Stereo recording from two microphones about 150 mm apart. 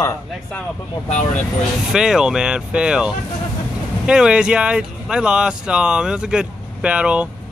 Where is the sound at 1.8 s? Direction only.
5° right (ahead or behind).